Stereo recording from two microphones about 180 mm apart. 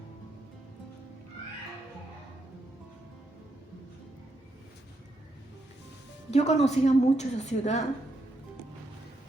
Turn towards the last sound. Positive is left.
turn(degrees=40)  # may be behind; listen again after turning